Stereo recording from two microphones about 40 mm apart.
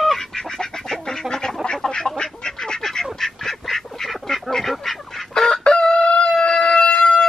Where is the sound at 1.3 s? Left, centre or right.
Centre.